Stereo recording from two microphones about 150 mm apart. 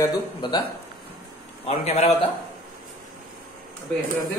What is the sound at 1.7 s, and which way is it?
Speech, 45° left (ahead or behind).